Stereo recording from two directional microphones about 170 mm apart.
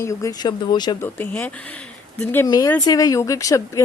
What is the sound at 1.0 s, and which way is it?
Speech, 10° left (ahead or behind).